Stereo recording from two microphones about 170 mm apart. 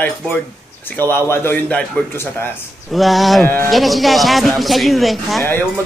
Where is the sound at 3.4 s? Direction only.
10° left (ahead or behind).